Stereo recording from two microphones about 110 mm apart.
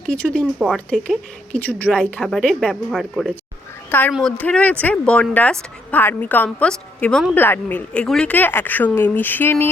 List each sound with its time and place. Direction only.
0.1 s speech: 10° left (ahead or behind)
1.5 s speech: 15° left (ahead or behind)
7.3 s speech: 20° left (ahead or behind)